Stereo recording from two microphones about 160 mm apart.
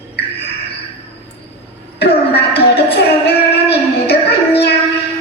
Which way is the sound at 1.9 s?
90° left.